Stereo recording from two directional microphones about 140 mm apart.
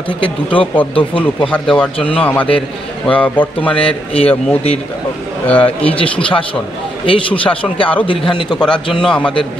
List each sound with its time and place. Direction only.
0.2 s a man's voice: 40° left (ahead or behind)
1.5 s a man's voice: 10° left (ahead or behind)
3.8 s speech: 45° left (ahead or behind)
5.5 s a man's voice: 10° left (ahead or behind)
5.9 s a man's voice: 40° left (ahead or behind)
8.5 s a man's voice: 5° left (ahead or behind)